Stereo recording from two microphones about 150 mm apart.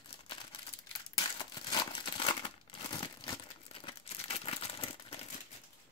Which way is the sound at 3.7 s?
40° left (ahead or behind).